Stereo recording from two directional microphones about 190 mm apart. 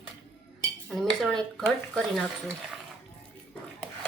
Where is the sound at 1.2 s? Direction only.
Centre (ahead or behind).